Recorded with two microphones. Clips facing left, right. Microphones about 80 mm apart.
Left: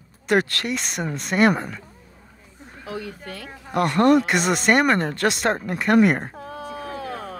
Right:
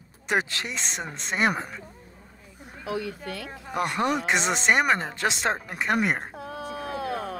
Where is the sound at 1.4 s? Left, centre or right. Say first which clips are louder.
Left 7 dB; centre.